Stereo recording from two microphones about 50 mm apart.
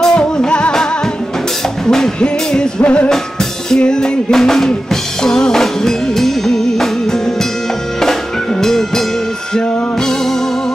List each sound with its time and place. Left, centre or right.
0.0 s music: centre
1.9 s music: centre
2.8 s music: left
3.7 s music: centre